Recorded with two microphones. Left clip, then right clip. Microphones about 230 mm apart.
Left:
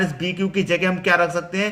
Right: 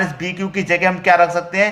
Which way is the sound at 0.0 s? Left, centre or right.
Centre.